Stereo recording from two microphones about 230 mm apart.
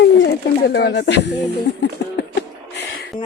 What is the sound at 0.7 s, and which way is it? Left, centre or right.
Speech, left.